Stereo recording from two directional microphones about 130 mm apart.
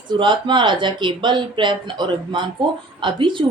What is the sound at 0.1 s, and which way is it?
A woman's voice, 40° right (ahead or behind).